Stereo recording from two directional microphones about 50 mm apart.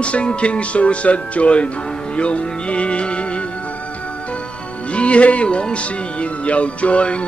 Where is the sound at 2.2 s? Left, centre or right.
Left.